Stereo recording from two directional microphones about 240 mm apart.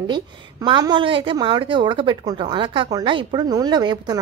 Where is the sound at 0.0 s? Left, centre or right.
Centre.